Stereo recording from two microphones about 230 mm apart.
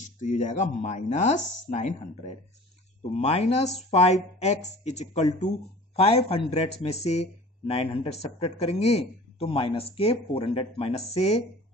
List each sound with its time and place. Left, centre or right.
0.0 s speech: left